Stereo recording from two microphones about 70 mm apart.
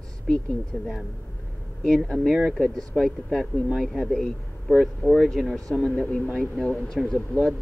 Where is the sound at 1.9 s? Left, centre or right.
Centre.